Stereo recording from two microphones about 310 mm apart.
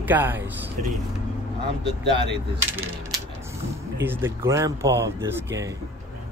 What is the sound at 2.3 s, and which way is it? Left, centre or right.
Speech, centre.